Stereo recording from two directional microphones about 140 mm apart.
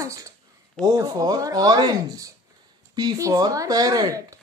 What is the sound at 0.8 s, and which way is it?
Speech, 25° right (ahead or behind).